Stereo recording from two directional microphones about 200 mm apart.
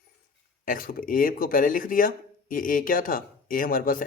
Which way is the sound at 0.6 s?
45° left (ahead or behind).